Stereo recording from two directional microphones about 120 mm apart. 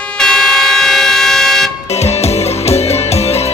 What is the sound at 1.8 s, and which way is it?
Music, 65° left (ahead or behind).